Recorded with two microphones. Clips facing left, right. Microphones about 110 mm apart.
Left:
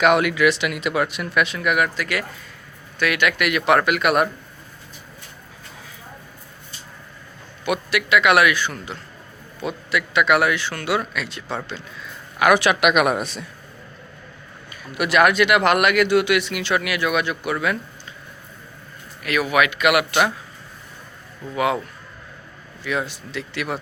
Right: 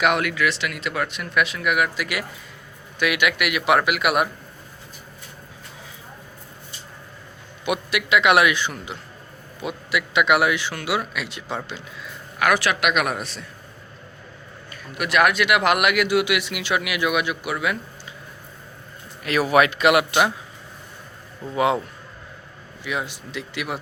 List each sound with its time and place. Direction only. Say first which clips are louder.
0.0 s speech: left 4 dB; 5° left (ahead or behind)
7.6 s speech: left 2 dB; 15° right (ahead or behind)
12.4 s speech: left 4 dB; 15° left (ahead or behind)
14.7 s speech: left 3 dB; 5° left (ahead or behind)
19.2 s speech: right 2 dB; 30° right (ahead or behind)
21.5 s speech: right 1 dB; 25° right (ahead or behind)
22.8 s speech: left 3 dB; 15° right (ahead or behind)